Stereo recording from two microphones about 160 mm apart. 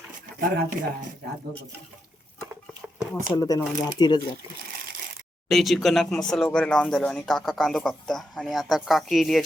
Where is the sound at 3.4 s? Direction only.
25° left (ahead or behind).